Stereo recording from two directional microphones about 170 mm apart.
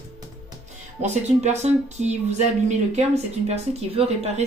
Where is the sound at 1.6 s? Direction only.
40° right (ahead or behind).